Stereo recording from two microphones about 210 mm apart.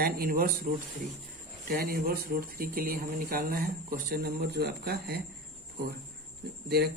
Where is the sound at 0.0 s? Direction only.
45° right (ahead or behind).